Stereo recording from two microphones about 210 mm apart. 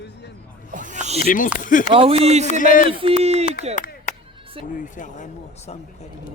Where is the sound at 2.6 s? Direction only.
40° left (ahead or behind).